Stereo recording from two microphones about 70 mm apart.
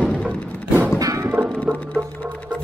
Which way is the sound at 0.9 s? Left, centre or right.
Right.